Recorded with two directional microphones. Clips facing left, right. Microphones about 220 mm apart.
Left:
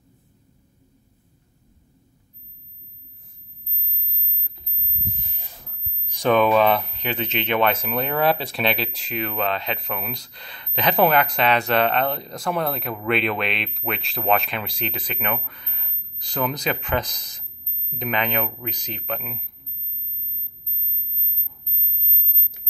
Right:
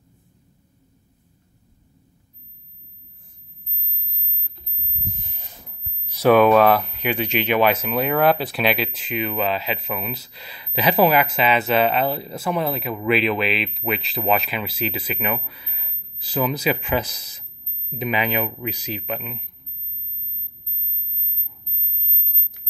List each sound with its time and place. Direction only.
6.2 s speech: 5° right (ahead or behind)